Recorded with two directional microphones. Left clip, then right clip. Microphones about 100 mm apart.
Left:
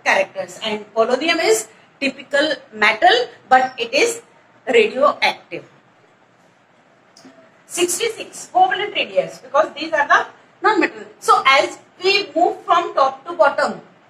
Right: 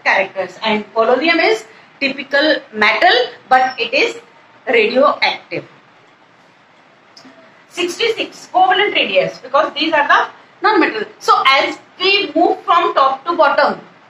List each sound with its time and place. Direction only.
0.0 s a woman's voice: 30° right (ahead or behind)
7.7 s a woman's voice: 30° right (ahead or behind)